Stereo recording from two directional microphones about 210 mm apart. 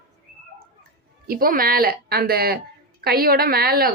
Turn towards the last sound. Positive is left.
turn(degrees=-45)  # may be behind; listen again after turning